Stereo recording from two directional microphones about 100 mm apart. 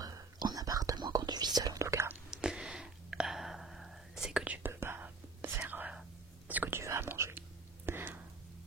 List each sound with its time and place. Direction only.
0.0 s whispering: 40° right (ahead or behind)
2.3 s a sound: 10° right (ahead or behind)
4.6 s whispering: 20° right (ahead or behind)